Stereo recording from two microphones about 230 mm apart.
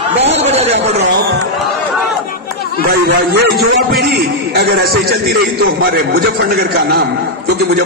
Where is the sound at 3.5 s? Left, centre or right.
Right.